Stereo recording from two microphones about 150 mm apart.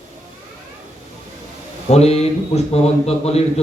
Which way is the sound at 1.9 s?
45° left (ahead or behind).